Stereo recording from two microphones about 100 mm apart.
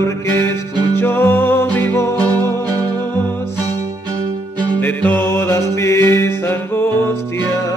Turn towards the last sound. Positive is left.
turn(degrees=20)  # may be behind; listen again after turning